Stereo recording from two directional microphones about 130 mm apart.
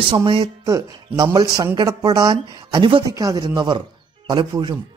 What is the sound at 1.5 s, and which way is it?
A man's voice, 30° right (ahead or behind).